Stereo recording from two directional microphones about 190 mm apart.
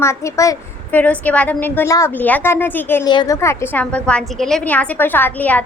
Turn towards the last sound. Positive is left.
turn(degrees=10)  # may be behind; listen again after turning